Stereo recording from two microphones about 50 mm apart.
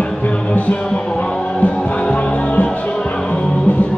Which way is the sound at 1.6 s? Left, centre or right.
Left.